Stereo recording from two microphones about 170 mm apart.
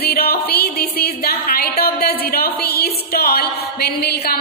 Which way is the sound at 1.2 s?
65° left (ahead or behind).